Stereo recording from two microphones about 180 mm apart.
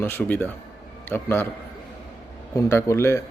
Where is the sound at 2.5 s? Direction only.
15° left (ahead or behind).